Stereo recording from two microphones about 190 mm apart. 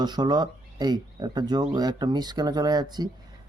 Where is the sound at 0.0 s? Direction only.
20° right (ahead or behind).